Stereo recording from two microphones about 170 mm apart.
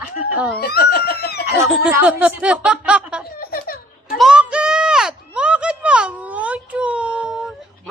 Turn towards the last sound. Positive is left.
turn(degrees=-5)  # may be behind; listen again after turning